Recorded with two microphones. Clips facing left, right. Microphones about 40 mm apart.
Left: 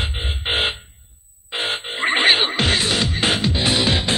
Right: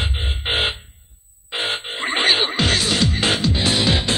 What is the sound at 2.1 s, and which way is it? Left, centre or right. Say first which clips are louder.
Music: left 2 dB; left.